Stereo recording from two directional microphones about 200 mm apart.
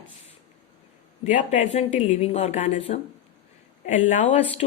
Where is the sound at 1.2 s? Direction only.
40° left (ahead or behind).